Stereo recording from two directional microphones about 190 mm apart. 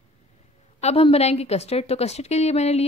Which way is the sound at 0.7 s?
35° left (ahead or behind).